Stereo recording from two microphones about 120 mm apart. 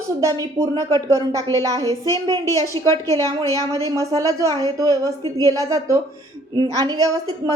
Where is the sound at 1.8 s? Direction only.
30° left (ahead or behind).